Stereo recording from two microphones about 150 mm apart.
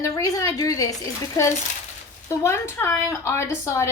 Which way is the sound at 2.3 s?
15° left (ahead or behind).